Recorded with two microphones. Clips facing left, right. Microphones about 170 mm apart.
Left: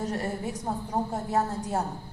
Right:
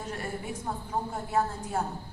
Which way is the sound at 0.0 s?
40° left (ahead or behind).